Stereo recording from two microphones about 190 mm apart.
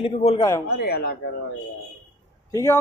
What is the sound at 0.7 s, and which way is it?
Speech, 55° left (ahead or behind).